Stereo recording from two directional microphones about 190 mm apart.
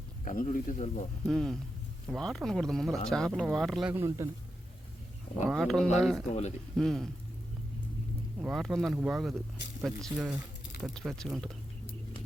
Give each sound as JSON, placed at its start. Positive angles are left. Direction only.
{"t": 0.3, "sound": "speech", "side_deg": 45}
{"t": 1.2, "sound": "speech", "side_deg": 0}
{"t": 5.5, "sound": "speech", "side_deg": 0}
{"t": 8.4, "sound": "speech", "side_deg": 0}